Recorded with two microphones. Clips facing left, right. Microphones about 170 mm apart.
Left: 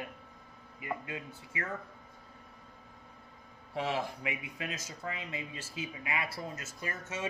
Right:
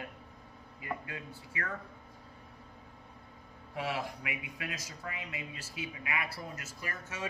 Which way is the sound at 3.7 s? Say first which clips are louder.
Left 2 dB; 25° left (ahead or behind).